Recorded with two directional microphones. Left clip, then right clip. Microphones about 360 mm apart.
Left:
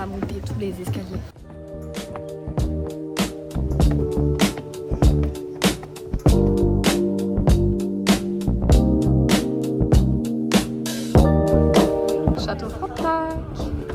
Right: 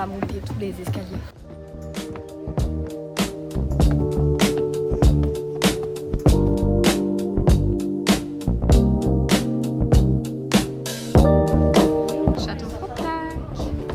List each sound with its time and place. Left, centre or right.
3.2 s music: centre
13.0 s train: centre